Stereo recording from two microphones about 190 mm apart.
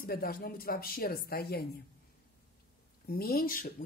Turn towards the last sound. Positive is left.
turn(degrees=50)  # may be behind; listen again after turning